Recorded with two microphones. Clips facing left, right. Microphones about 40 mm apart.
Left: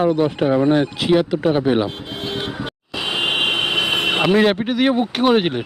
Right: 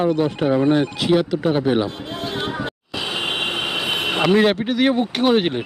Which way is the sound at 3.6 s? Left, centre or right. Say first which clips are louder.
Left 4 dB; left.